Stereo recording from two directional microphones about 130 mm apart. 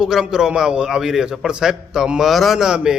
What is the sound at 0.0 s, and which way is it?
A man's voice, 5° right (ahead or behind).